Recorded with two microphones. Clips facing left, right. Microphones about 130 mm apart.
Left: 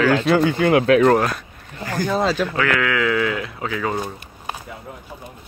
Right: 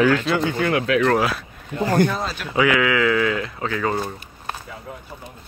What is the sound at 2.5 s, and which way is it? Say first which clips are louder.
Speech: right 2 dB; 10° right (ahead or behind).